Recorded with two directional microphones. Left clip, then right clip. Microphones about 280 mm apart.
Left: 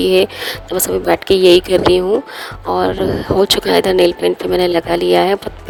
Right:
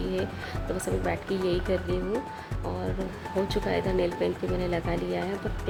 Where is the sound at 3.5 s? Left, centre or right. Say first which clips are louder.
Left 16 dB; left.